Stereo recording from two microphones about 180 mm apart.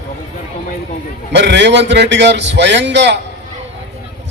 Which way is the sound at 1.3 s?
75° right (ahead or behind).